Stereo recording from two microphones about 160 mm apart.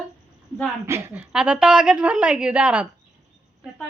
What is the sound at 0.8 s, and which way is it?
Speech, 15° right (ahead or behind).